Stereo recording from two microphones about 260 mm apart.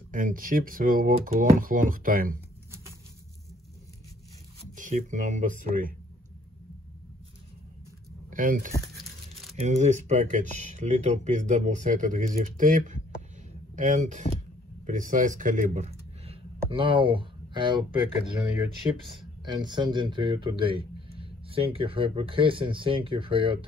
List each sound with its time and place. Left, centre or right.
0.1 s speech: right
4.7 s speech: right
8.3 s speech: right
8.8 s crumpling: centre
9.6 s speech: right
18.8 s speech: centre